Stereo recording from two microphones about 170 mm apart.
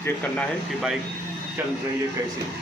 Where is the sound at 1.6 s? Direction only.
10° right (ahead or behind).